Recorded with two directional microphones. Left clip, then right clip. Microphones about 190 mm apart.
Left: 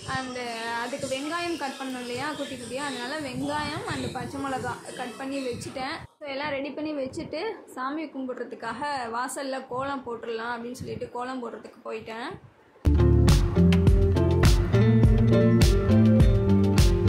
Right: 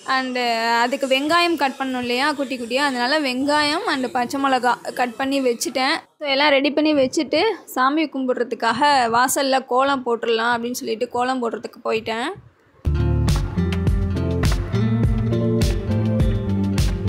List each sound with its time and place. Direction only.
0.1 s a woman's voice: 55° right (ahead or behind)
13.2 s music: centre (ahead or behind)